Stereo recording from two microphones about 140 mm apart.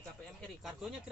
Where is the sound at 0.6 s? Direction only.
Centre (ahead or behind).